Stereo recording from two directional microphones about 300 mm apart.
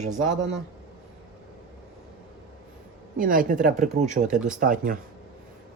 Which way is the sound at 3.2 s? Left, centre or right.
Right.